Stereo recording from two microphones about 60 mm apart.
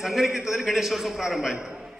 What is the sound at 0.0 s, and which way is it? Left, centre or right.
A man's voice, centre.